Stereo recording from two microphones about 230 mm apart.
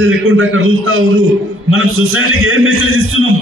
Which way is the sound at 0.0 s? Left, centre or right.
Right.